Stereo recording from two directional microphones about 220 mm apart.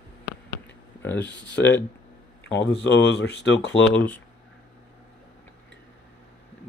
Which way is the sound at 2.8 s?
50° left (ahead or behind).